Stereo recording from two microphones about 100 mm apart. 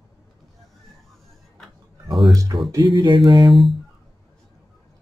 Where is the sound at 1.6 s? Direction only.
Centre (ahead or behind).